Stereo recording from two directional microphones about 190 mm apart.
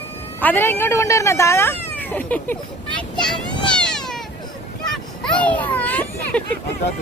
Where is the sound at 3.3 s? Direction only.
5° left (ahead or behind).